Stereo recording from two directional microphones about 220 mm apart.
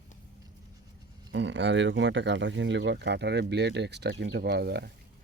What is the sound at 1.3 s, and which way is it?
Speech, 55° right (ahead or behind).